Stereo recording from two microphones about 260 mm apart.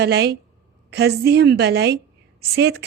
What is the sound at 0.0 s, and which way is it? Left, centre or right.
A woman's voice, right.